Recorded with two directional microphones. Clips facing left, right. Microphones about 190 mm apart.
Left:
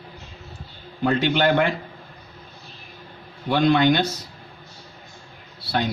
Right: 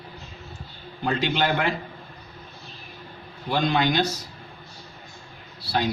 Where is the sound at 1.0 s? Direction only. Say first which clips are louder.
Left 4 dB; 55° left (ahead or behind).